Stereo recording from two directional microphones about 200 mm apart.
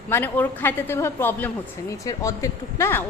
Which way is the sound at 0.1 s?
10° left (ahead or behind).